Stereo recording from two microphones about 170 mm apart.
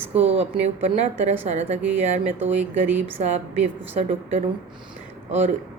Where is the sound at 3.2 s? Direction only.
40° right (ahead or behind).